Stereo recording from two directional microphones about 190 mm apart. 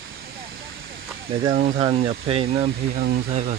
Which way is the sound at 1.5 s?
35° right (ahead or behind).